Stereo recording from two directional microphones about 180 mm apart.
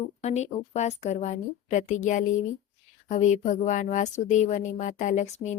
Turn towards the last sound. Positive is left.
turn(degrees=40)  # may be behind; listen again after turning